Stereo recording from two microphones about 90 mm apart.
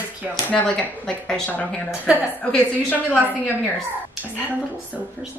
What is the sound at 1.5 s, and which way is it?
Speech, 15° left (ahead or behind).